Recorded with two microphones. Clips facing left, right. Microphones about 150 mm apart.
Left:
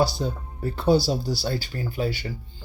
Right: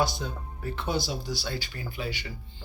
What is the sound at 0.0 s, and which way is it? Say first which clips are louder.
Speech: left 5 dB; 35° left (ahead or behind).